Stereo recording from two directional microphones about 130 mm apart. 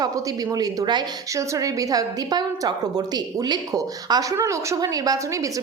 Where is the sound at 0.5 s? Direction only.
30° right (ahead or behind).